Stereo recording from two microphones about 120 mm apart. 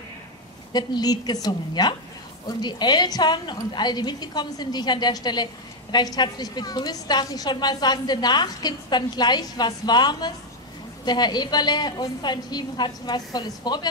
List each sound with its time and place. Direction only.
0.7 s a woman's voice: 35° left (ahead or behind)